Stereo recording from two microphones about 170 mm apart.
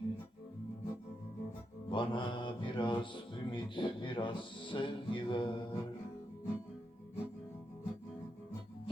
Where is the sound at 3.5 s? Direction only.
30° left (ahead or behind).